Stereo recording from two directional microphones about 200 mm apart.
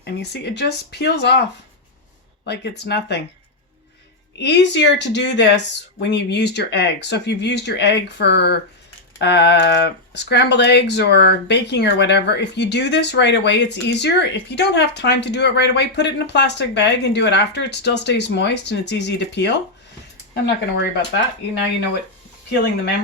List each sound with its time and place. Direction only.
0.0 s speech: 55° left (ahead or behind)
2.5 s speech: 55° left (ahead or behind)
4.4 s speech: 60° left (ahead or behind)